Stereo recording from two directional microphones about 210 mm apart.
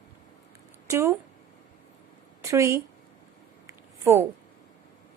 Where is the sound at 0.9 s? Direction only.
10° right (ahead or behind).